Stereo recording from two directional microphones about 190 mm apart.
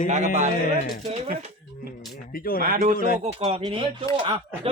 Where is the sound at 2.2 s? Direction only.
50° left (ahead or behind).